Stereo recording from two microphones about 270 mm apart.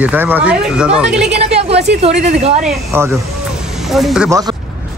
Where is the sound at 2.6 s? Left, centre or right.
Centre.